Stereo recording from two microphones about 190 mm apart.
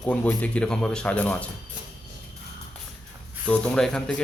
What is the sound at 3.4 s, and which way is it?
Speech, 5° left (ahead or behind).